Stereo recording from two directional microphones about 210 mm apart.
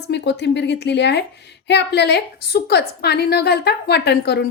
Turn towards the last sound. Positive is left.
turn(degrees=50)  # may be behind; listen again after turning